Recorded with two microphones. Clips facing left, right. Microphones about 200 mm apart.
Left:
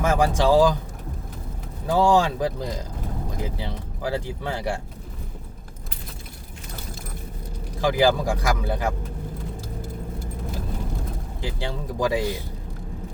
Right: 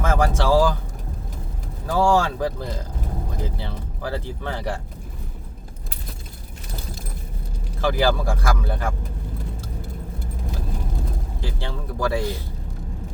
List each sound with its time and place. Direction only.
0.0 s speech: 15° left (ahead or behind)
1.9 s speech: 15° left (ahead or behind)
7.8 s speech: 15° left (ahead or behind)
11.4 s speech: 15° left (ahead or behind)